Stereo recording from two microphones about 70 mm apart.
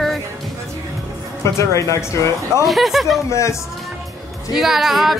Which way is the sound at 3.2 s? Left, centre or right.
Left.